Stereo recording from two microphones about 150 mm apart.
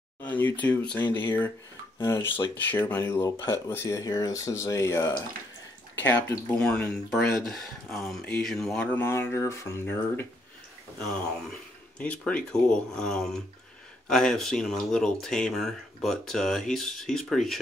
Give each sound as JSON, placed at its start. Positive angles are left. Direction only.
{"t": 0.2, "sound": "speech", "side_deg": 10}
{"t": 6.0, "sound": "speech", "side_deg": 10}